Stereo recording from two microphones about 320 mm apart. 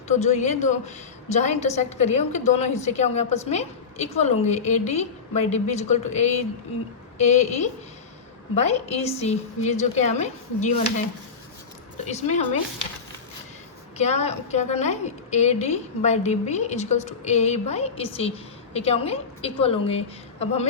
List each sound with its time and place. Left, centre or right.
0.1 s a woman's voice: left
11.9 s speech: left
14.0 s a woman's voice: centre